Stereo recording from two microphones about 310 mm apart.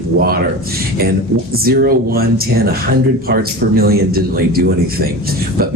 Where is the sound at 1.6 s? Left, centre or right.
Right.